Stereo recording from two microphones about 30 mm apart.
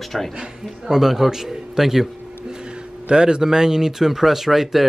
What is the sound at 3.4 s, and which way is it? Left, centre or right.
Speech, centre.